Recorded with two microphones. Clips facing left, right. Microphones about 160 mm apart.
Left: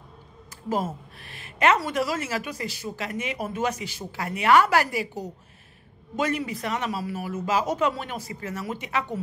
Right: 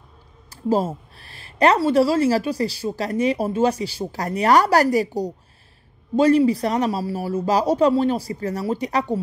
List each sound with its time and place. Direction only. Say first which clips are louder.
0.7 s a woman's voice: right 7 dB; 30° right (ahead or behind)